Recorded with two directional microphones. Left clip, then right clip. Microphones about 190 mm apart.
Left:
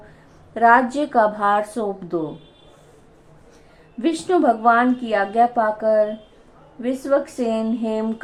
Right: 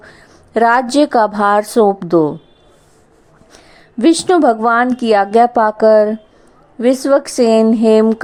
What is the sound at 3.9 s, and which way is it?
A woman's voice, 45° right (ahead or behind).